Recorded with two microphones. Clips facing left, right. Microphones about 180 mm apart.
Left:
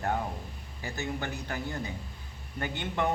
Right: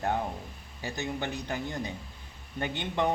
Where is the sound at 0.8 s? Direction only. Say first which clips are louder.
Right 1 dB; 20° right (ahead or behind).